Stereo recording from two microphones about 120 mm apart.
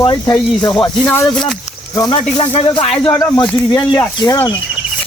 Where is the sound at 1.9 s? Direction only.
35° left (ahead or behind).